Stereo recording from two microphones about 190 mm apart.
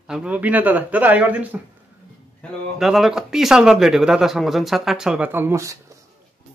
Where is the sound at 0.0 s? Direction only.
5° right (ahead or behind).